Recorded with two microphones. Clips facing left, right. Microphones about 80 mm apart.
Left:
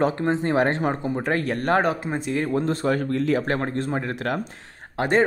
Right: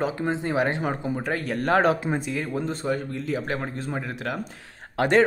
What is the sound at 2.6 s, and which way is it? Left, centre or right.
Speech, left.